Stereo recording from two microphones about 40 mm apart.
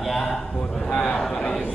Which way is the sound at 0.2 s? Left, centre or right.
Centre.